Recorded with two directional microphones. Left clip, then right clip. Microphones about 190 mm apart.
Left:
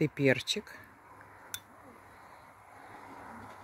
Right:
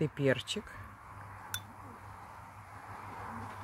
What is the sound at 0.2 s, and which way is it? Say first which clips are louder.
Speech: left 3 dB; 35° left (ahead or behind).